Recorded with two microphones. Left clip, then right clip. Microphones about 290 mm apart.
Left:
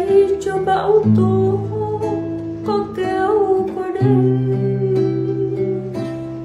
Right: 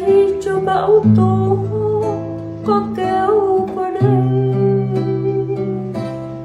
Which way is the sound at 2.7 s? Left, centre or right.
Centre.